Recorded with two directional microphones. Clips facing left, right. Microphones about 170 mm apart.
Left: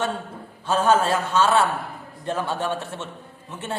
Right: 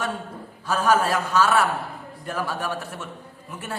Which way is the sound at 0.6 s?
25° left (ahead or behind).